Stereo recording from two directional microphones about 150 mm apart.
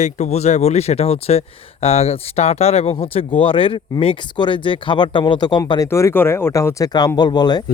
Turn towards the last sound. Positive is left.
turn(degrees=30)  # may be behind; listen again after turning